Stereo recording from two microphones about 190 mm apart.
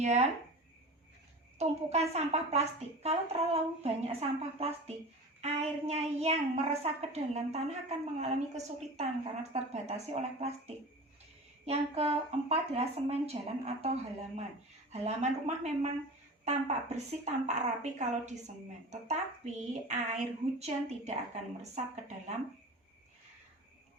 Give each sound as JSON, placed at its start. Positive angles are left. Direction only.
{"t": 0.0, "sound": "a woman's voice", "side_deg": -35}
{"t": 1.5, "sound": "a woman's voice", "side_deg": -35}